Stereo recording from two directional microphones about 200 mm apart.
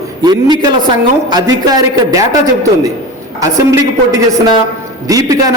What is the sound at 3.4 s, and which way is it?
A man's voice, 20° right (ahead or behind).